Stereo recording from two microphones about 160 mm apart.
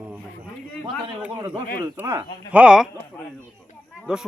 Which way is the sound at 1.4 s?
25° right (ahead or behind).